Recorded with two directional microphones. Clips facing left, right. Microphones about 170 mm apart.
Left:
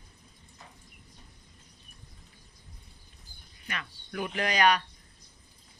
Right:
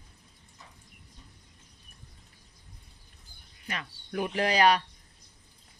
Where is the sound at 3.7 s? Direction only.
30° right (ahead or behind).